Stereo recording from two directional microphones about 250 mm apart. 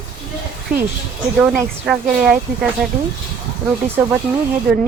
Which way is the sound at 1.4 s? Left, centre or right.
Centre.